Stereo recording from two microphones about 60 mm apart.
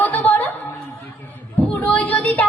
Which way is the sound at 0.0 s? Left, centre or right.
Left.